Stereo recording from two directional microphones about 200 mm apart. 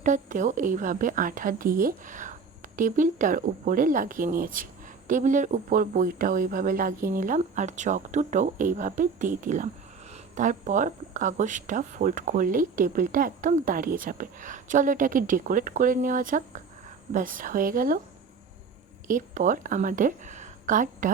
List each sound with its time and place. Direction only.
0.0 s a woman's voice: 40° right (ahead or behind)
19.0 s a woman's voice: 40° right (ahead or behind)